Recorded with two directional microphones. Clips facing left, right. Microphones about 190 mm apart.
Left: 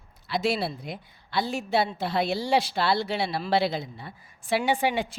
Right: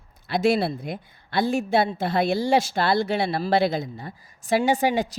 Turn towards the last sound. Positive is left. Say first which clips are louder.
# right 4 dB
turn(degrees=-40)  # may be behind; listen again after turning